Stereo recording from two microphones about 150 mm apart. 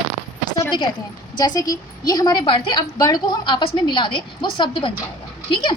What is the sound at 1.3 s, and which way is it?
A woman's voice, 25° left (ahead or behind).